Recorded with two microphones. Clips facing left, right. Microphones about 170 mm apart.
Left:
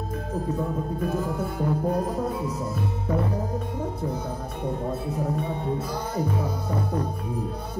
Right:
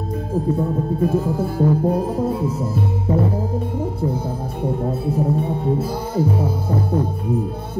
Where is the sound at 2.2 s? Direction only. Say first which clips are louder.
Right 6 dB; 30° right (ahead or behind).